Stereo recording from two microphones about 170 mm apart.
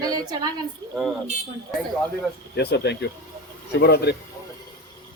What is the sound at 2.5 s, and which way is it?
Speech, 80° left.